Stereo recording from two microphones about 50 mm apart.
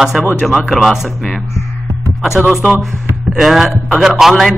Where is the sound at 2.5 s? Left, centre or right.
Centre.